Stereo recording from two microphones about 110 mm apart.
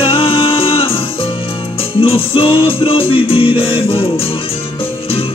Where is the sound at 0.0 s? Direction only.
60° left (ahead or behind).